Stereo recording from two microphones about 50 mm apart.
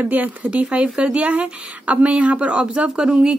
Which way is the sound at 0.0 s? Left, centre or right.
Right.